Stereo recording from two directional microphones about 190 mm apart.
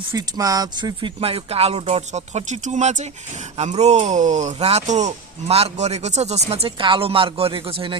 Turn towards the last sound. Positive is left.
turn(degrees=-25)  # may be behind; listen again after turning